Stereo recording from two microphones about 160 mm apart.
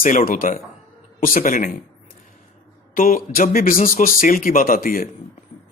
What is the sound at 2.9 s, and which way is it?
A man's voice, 60° left (ahead or behind).